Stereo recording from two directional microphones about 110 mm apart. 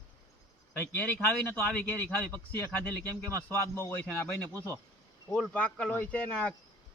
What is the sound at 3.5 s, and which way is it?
Speech, 25° left (ahead or behind).